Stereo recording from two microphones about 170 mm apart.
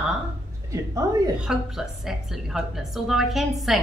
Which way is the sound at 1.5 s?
5° right (ahead or behind).